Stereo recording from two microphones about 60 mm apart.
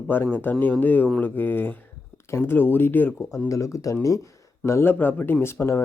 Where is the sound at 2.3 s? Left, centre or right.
Left.